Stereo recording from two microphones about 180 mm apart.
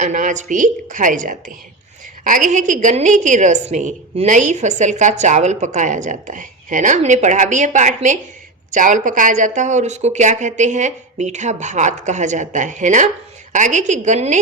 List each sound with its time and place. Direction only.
0.0 s a woman's voice: 45° right (ahead or behind)